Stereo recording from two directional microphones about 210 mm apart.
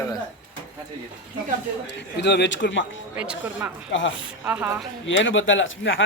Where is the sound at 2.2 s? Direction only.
55° left (ahead or behind).